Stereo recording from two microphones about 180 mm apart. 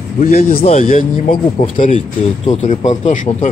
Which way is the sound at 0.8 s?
50° left (ahead or behind).